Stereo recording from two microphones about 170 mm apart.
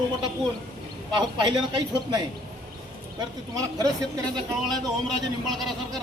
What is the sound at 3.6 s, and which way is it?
Speech, 20° right (ahead or behind).